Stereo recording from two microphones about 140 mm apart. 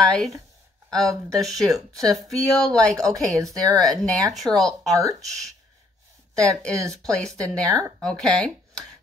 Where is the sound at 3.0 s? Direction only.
25° right (ahead or behind).